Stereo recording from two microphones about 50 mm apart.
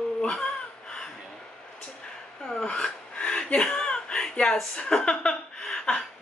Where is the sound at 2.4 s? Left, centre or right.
Centre.